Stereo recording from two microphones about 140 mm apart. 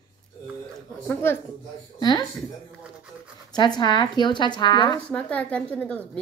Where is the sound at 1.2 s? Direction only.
15° left (ahead or behind).